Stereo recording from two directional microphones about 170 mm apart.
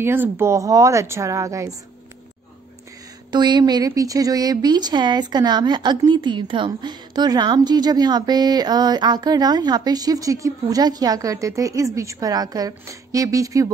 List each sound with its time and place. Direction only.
0.0 s a woman's voice: 15° right (ahead or behind)
3.3 s a woman's voice: 25° right (ahead or behind)